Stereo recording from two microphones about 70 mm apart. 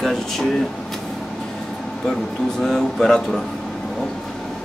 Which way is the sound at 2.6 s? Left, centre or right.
Centre.